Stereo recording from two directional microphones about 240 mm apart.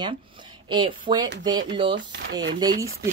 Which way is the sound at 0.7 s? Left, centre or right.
Centre.